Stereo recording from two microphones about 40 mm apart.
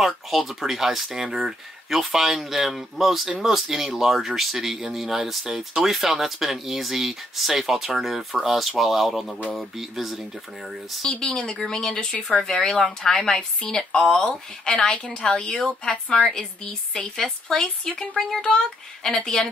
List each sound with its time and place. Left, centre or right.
0.0 s speech: centre
11.0 s a woman's voice: centre